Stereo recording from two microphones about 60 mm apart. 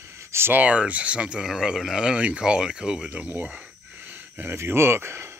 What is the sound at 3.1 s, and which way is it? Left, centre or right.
Speech, right.